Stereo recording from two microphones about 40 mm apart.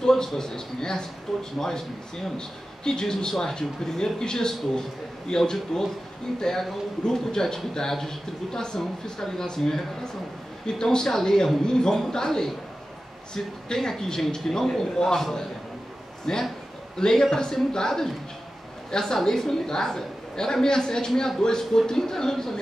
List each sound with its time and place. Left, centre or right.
0.0 s a man's voice: centre
1.3 s speech: centre
2.2 s speech: centre
16.3 s a woman's voice: centre